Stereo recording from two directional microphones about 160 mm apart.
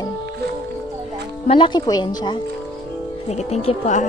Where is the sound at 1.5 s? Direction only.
30° left (ahead or behind).